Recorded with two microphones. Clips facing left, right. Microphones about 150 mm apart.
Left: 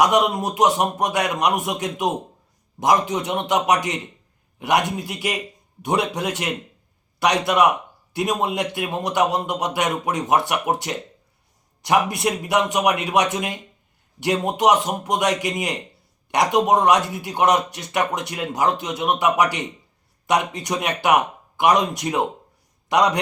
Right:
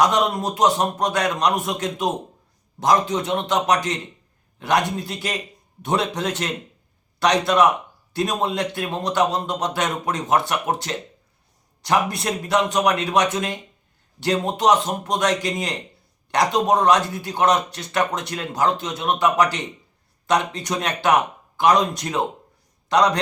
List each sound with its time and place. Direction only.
0.0 s speech: 15° left (ahead or behind)